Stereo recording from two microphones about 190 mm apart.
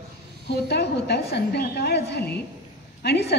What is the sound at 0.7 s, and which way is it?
A woman's voice, 60° left (ahead or behind).